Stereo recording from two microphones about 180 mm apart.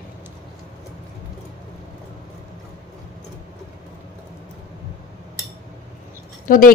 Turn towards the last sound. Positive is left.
turn(degrees=50)  # may be behind; listen again after turning